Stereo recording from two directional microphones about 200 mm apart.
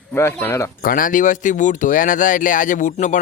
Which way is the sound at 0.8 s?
45° left (ahead or behind).